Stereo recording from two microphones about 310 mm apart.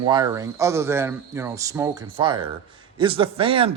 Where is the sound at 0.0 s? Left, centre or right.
Centre.